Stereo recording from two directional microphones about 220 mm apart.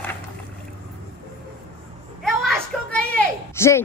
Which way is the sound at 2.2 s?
Centre (ahead or behind).